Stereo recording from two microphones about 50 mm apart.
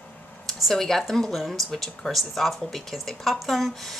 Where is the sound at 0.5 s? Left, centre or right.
Centre.